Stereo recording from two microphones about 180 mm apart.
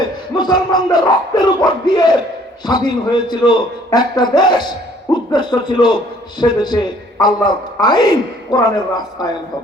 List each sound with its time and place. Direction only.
0.3 s a man's voice: 25° left (ahead or behind)